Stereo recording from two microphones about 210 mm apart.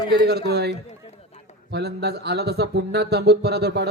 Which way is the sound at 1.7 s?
50° right (ahead or behind).